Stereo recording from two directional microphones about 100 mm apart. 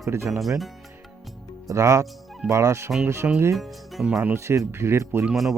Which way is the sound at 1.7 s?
35° right (ahead or behind).